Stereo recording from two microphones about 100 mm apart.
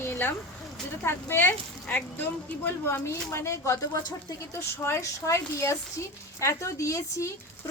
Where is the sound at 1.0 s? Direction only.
25° left (ahead or behind).